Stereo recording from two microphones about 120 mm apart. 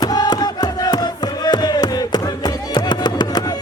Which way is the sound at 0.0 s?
35° left (ahead or behind).